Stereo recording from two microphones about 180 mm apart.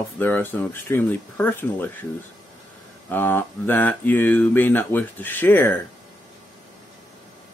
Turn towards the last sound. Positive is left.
turn(degrees=10)  # may be behind; listen again after turning